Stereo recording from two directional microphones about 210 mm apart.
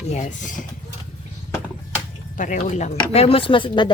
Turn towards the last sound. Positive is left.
turn(degrees=20)  # may be behind; listen again after turning